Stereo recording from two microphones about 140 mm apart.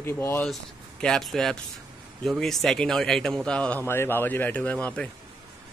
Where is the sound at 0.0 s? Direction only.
15° left (ahead or behind).